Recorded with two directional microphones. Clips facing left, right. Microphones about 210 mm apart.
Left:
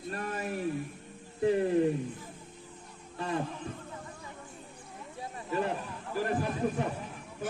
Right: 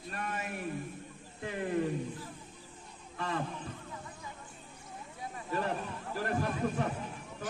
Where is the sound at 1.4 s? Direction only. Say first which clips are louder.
Left 12 dB; 30° left (ahead or behind).